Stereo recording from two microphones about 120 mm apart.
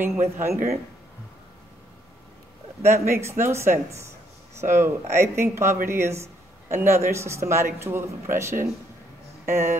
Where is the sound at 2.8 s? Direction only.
20° right (ahead or behind).